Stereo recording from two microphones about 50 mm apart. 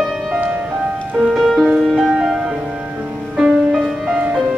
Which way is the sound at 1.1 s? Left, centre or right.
Centre.